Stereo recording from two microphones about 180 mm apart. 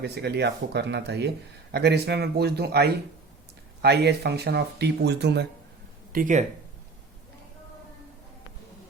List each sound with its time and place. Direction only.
0.0 s speech: 70° right (ahead or behind)
6.1 s speech: 45° right (ahead or behind)